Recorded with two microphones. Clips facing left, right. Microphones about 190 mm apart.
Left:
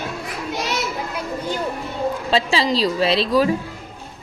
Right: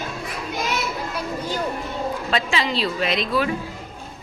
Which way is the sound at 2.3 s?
35° left (ahead or behind).